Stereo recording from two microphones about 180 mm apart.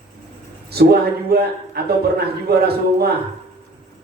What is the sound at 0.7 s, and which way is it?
Speech, 60° right (ahead or behind).